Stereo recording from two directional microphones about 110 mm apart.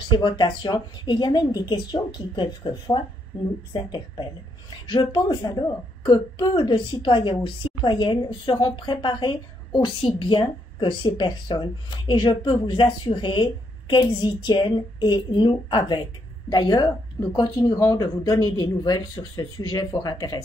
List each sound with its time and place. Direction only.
0.1 s a woman's voice: 45° left (ahead or behind)